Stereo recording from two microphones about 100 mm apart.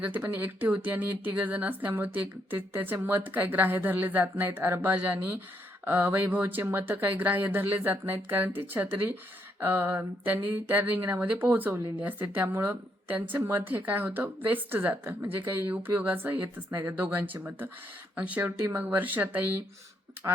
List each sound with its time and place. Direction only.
0.0 s speech: 15° right (ahead or behind)